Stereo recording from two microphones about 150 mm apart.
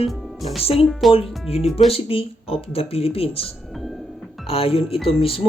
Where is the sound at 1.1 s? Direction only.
40° left (ahead or behind).